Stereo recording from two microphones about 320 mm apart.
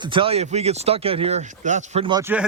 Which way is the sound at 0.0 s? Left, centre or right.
Centre.